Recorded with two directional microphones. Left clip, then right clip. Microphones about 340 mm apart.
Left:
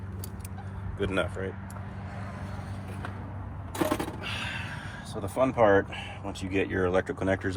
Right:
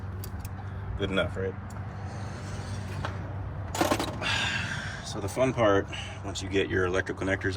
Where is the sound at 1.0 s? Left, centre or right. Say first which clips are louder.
Right 1 dB; left.